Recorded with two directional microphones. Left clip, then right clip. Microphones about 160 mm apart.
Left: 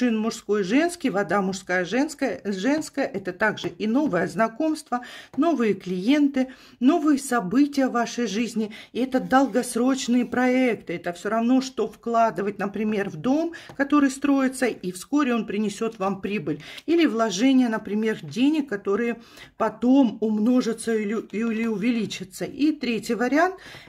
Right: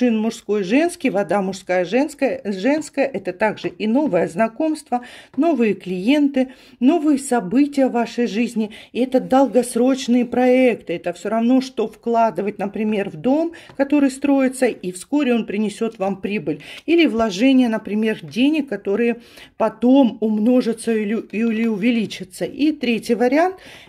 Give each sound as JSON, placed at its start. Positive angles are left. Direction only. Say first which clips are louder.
{"t": 0.0, "sound": "speech", "louder": "right 5 dB", "side_deg": -5}